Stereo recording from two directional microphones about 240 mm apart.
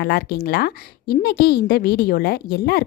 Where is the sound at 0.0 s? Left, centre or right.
Left.